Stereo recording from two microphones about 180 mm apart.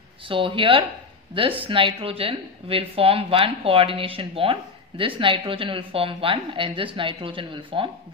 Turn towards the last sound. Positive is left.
turn(degrees=-30)  # may be behind; listen again after turning